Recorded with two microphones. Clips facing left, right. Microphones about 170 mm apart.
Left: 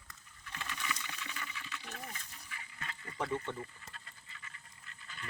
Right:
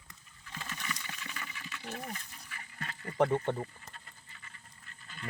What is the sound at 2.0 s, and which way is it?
Wild animals, 50° right (ahead or behind).